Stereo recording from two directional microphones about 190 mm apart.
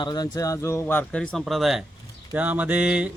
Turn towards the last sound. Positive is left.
turn(degrees=-5)  # may be behind; listen again after turning